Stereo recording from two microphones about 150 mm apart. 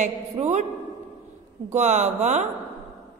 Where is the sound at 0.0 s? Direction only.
50° right (ahead or behind).